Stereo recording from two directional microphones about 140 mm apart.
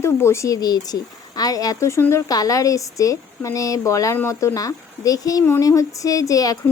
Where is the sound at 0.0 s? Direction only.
20° left (ahead or behind).